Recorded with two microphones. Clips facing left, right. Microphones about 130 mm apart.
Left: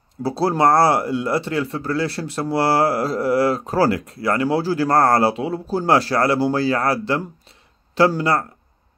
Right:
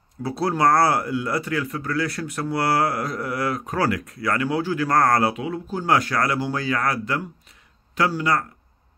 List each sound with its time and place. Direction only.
0.2 s speech: 30° left (ahead or behind)